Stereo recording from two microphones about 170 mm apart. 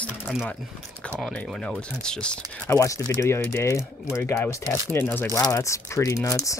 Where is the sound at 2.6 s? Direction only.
20° left (ahead or behind).